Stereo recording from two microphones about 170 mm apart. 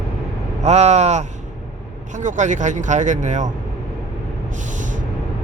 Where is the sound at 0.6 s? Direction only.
40° right (ahead or behind).